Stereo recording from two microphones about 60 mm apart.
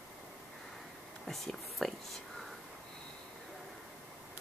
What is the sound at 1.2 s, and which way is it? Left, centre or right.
Whispering, centre.